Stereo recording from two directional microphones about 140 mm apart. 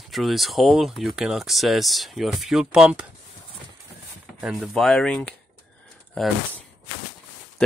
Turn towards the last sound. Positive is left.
turn(degrees=5)  # may be behind; listen again after turning